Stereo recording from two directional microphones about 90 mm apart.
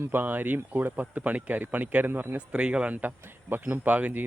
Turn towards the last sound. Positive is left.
turn(degrees=-15)  # may be behind; listen again after turning